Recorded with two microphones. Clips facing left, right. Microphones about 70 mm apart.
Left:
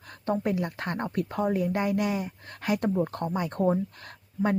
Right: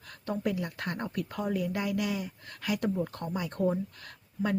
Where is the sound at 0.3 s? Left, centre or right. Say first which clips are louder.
Left 4 dB; left.